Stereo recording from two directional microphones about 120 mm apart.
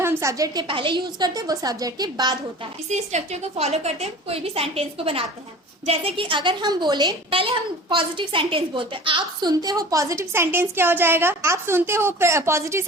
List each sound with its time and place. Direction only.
0.0 s a woman's voice: 20° right (ahead or behind)
0.7 s a woman's voice: 45° right (ahead or behind)
2.9 s a woman's voice: 70° right (ahead or behind); by 12.8 s 20° right (ahead or behind)